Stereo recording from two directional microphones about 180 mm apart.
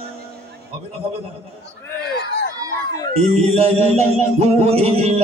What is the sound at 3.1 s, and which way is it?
Music, 35° right (ahead or behind).